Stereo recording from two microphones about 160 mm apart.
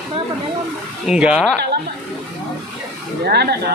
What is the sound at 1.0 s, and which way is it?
Speech, 5° right (ahead or behind).